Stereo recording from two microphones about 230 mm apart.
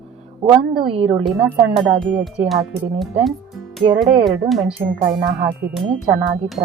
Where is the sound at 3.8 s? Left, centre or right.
Right.